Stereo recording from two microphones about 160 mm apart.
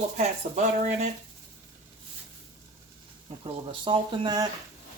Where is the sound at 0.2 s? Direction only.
50° right (ahead or behind).